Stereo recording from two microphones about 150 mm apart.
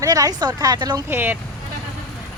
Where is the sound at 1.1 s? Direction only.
15° right (ahead or behind).